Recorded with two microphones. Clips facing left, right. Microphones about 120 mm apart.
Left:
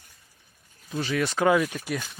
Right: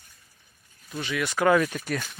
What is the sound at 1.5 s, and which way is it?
Speech, 15° left (ahead or behind).